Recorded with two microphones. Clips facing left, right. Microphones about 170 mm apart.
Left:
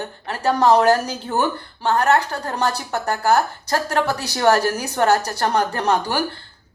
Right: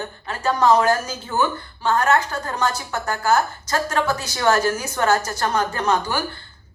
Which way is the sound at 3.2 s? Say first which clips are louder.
Left 1 dB; 65° left (ahead or behind).